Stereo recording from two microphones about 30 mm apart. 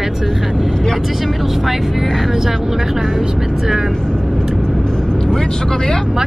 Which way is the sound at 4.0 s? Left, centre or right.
Left.